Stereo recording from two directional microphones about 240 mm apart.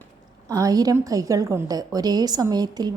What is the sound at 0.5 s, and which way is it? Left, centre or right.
A woman's voice, centre.